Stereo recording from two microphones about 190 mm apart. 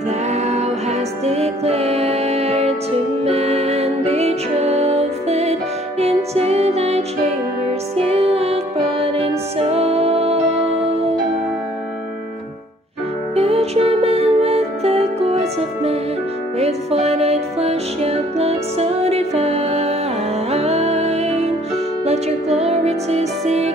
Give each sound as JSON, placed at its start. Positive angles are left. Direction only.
{"t": 0.3, "sound": "music", "side_deg": -35}
{"t": 8.1, "sound": "music", "side_deg": -30}
{"t": 9.6, "sound": "music", "side_deg": -30}
{"t": 13.4, "sound": "music", "side_deg": -30}